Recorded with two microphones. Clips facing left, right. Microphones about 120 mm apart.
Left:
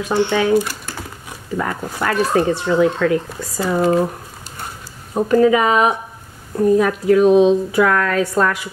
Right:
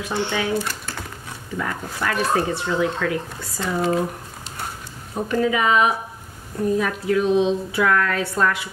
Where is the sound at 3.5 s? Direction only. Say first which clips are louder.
Left 6 dB; 5° left (ahead or behind).